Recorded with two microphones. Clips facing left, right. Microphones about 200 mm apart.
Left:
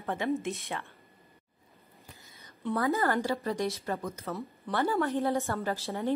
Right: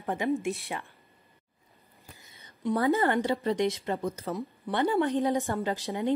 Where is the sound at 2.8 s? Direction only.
20° right (ahead or behind).